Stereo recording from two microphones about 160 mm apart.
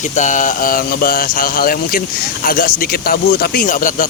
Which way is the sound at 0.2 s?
50° left (ahead or behind).